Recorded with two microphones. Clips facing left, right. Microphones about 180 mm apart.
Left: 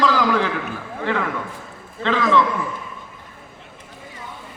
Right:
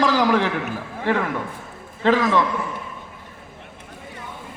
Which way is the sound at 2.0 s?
45° right (ahead or behind).